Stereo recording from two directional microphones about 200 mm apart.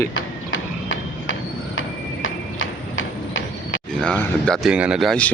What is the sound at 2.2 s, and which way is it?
Clip-clop, 75° left (ahead or behind).